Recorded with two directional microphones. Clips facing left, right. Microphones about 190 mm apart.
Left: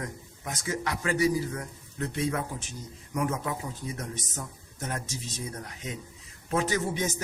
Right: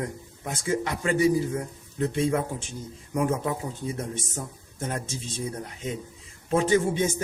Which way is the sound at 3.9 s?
30° right (ahead or behind).